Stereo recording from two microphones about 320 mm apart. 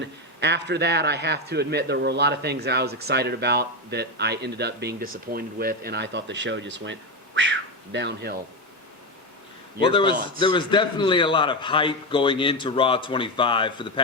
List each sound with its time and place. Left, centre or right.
0.0 s a man's voice: right
7.9 s a man's voice: right
9.8 s a man's voice: centre